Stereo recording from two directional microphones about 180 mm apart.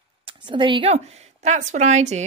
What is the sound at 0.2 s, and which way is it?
A woman's voice, 30° right (ahead or behind).